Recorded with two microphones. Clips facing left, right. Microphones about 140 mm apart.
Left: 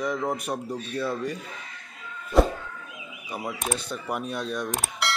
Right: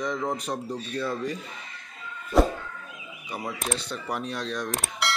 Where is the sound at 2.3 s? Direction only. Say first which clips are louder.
Left 1 dB; centre (ahead or behind).